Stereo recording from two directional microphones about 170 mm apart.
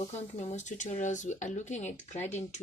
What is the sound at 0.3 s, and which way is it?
Speech, 45° left (ahead or behind).